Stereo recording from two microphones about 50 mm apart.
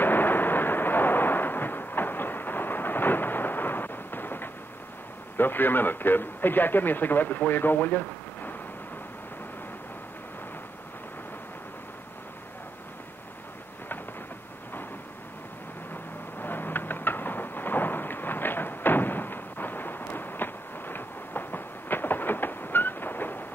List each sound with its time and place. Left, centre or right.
0.0 s artillery fire: left
5.4 s a man's voice: left
16.3 s thunder: left